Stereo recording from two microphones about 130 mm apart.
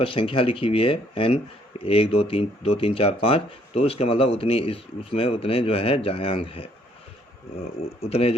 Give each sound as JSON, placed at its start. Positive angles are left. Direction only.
{"t": 0.0, "sound": "speech", "side_deg": 45}
{"t": 8.0, "sound": "speech", "side_deg": 50}